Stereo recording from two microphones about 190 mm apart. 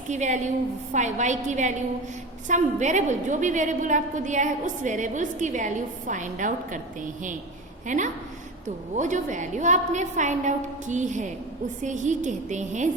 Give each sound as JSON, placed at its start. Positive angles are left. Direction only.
{"t": 0.1, "sound": "a woman's voice", "side_deg": -40}